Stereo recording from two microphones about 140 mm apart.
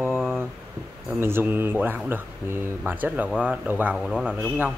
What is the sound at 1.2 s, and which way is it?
Speech, 15° right (ahead or behind).